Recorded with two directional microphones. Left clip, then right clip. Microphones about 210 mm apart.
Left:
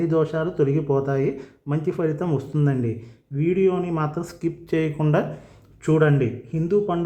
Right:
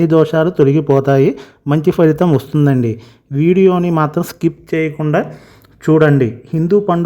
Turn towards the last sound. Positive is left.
turn(degrees=-40)  # may be behind; listen again after turning